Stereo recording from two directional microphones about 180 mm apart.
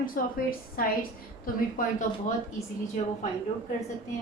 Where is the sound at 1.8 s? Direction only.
50° left (ahead or behind).